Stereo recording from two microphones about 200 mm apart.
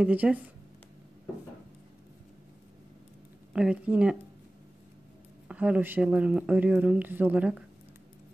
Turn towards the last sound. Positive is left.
turn(degrees=-5)  # may be behind; listen again after turning